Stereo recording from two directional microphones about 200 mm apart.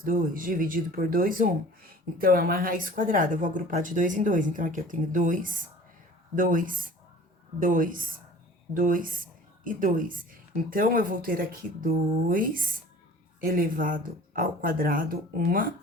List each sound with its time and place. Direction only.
0.0 s a woman's voice: 45° right (ahead or behind)